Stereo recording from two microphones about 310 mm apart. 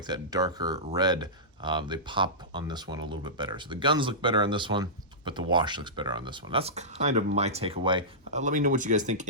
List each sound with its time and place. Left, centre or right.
0.1 s speech: centre